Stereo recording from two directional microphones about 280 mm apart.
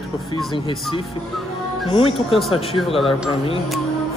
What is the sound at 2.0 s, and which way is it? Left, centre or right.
Speech, centre.